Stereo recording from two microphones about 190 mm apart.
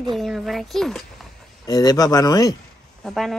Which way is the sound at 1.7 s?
20° left (ahead or behind).